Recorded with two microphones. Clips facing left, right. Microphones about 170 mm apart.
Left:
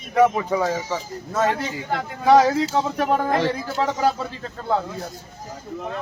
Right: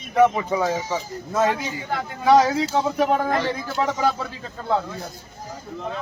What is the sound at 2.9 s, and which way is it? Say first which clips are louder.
Speech: right 1 dB; centre (ahead or behind).